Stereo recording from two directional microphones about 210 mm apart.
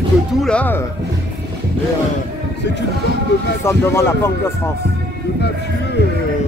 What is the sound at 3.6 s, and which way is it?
Speech, 10° left (ahead or behind).